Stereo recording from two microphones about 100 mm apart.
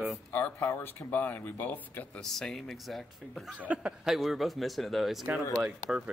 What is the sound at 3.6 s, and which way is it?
Speech, 15° right (ahead or behind).